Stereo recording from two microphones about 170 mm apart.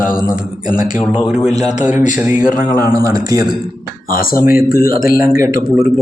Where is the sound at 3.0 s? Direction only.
20° right (ahead or behind).